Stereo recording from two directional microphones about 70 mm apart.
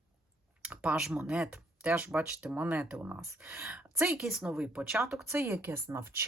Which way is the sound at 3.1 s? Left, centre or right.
Right.